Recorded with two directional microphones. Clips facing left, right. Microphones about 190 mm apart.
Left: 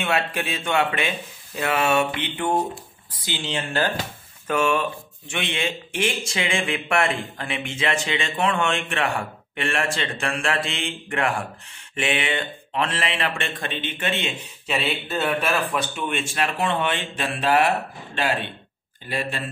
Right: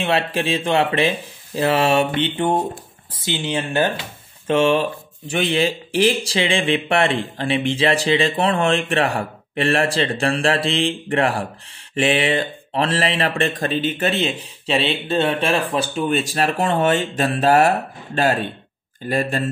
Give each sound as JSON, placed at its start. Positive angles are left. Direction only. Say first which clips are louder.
{"t": 0.0, "sound": "speech", "louder": "right 4 dB", "side_deg": -30}